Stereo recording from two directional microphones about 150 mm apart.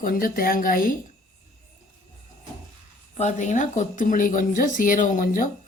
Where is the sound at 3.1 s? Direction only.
50° left (ahead or behind).